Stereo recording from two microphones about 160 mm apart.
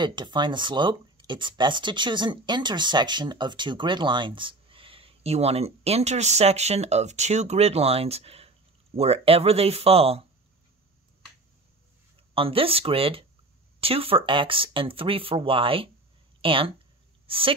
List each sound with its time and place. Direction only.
0.0 s speech: 30° right (ahead or behind)
12.4 s speech: 35° right (ahead or behind)